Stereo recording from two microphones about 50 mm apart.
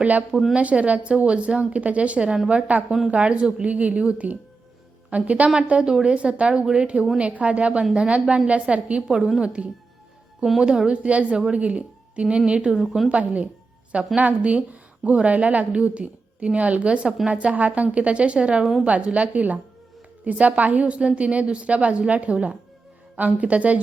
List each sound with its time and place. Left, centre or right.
0.0 s a woman's voice: right
18.6 s a woman's voice: centre
18.9 s a woman's voice: right